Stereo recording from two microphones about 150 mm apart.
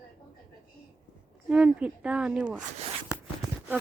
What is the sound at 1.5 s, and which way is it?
Speech, 10° right (ahead or behind).